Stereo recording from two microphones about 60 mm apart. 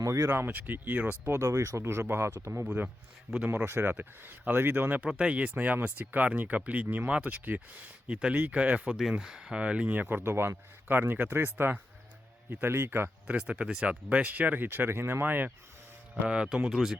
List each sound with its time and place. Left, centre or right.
0.0 s speech: right
0.3 s speech: right
1.3 s speech: right
2.6 s speech: right
3.5 s speech: right
5.0 s speech: centre
10.2 s speech: right
13.2 s speech: centre
16.2 s speech: centre
16.6 s speech: centre